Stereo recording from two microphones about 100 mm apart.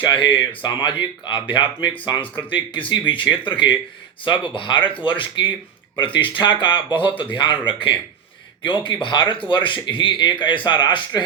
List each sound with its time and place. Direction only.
0.0 s speech: 55° left (ahead or behind)
2.2 s speech: 15° left (ahead or behind)
2.5 s speech: 55° left (ahead or behind)